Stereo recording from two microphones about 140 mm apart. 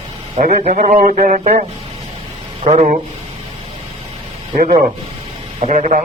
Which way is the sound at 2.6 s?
55° right (ahead or behind).